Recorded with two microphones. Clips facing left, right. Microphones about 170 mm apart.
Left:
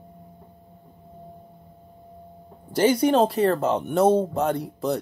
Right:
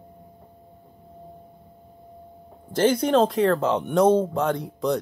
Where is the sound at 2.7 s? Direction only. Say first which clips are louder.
Left 1 dB; 10° left (ahead or behind).